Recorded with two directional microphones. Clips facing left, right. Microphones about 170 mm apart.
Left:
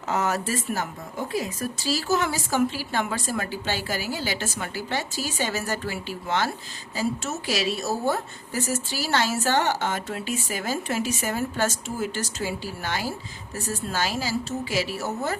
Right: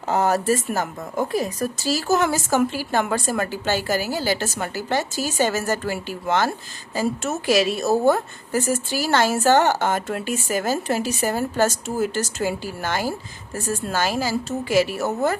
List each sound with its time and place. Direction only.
0.1 s a woman's voice: 35° right (ahead or behind); by 15.4 s 55° right (ahead or behind)